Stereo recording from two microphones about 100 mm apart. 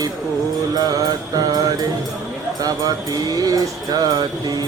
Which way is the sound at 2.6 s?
40° right (ahead or behind).